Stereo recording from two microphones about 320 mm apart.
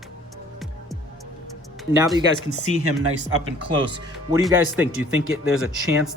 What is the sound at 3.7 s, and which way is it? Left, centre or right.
Speech, centre.